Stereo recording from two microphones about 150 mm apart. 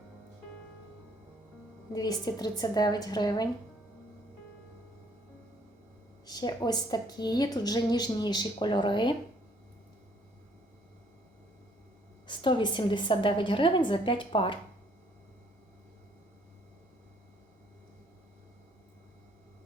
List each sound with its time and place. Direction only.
1.9 s a woman's voice: 25° left (ahead or behind)
6.2 s a woman's voice: 25° left (ahead or behind)
12.3 s a woman's voice: 30° left (ahead or behind)